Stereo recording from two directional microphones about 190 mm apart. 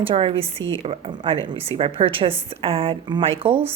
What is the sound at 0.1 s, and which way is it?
A woman's voice, 25° right (ahead or behind).